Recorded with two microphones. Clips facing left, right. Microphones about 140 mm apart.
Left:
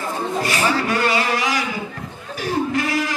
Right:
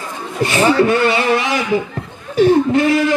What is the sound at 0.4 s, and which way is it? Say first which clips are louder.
A man's voice: right 9 dB; 25° right (ahead or behind).